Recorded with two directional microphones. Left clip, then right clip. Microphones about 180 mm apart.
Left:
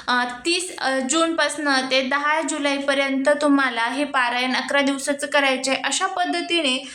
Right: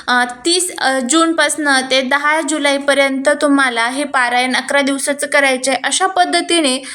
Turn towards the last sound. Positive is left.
turn(degrees=-35)  # may be behind; listen again after turning